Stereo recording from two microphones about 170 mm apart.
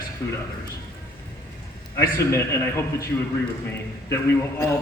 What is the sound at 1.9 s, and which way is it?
A man's voice, 15° left (ahead or behind).